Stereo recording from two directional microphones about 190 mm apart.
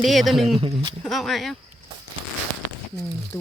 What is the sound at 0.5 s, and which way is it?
Speech, 25° right (ahead or behind).